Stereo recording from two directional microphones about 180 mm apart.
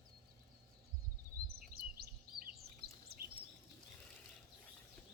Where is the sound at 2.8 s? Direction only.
55° right (ahead or behind).